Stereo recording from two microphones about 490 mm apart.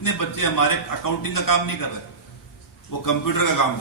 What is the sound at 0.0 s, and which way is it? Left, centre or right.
A man's voice, left.